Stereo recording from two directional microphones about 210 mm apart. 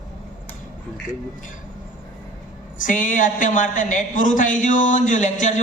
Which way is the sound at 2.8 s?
40° left (ahead or behind).